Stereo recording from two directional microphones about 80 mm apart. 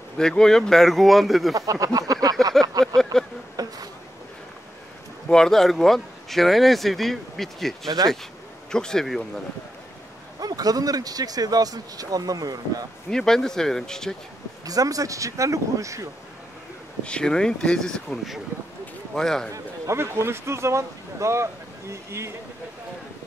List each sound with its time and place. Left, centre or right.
0.2 s speech: centre
1.5 s speech: right
2.6 s speech: centre
3.5 s speech: right
5.3 s speech: centre
10.4 s speech: right
13.1 s speech: centre
14.7 s speech: right
17.0 s speech: centre
19.5 s speech: right